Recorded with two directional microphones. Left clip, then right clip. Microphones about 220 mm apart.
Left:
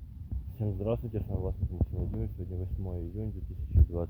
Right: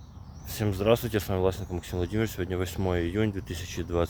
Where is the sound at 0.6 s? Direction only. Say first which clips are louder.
Right 9 dB; 20° right (ahead or behind).